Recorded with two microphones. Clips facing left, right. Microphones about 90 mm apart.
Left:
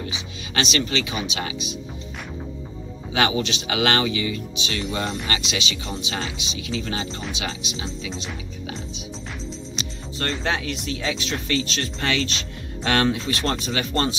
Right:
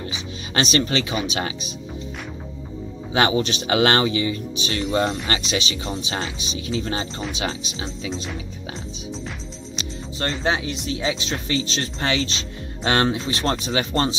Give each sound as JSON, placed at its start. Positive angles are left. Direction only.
{"t": 0.6, "sound": "speech", "side_deg": -40}
{"t": 3.1, "sound": "speech", "side_deg": -30}
{"t": 10.4, "sound": "speech", "side_deg": -20}